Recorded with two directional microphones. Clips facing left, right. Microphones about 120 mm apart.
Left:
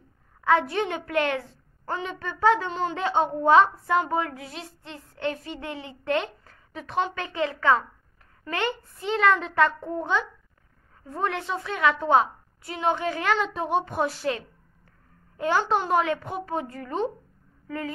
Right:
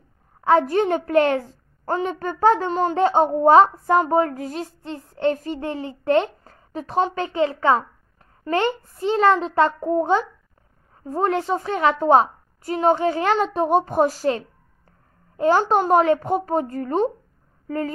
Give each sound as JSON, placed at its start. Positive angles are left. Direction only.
{"t": 0.4, "sound": "a child's voice", "side_deg": -35}